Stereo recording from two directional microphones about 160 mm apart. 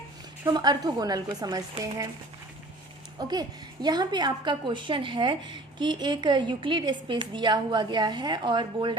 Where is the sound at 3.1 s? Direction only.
25° right (ahead or behind).